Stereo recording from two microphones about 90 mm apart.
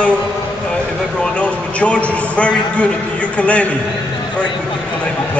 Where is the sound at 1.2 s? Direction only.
15° left (ahead or behind).